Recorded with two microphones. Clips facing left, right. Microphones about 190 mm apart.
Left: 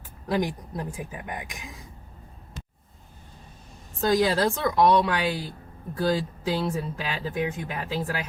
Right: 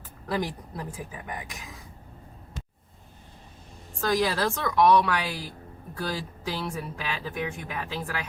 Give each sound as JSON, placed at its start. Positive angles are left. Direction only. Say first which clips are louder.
{"t": 0.3, "sound": "speech", "louder": "left 3 dB", "side_deg": 20}
{"t": 4.0, "sound": "speech", "louder": "left 3 dB", "side_deg": 20}